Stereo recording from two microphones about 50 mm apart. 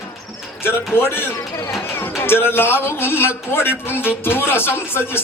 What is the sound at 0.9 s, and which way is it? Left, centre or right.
A man's voice, left.